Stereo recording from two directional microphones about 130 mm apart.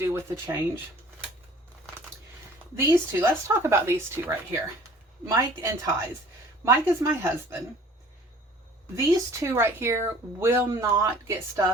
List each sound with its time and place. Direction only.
0.0 s speech: 20° right (ahead or behind)
2.7 s speech: 15° right (ahead or behind)
9.0 s speech: 25° right (ahead or behind)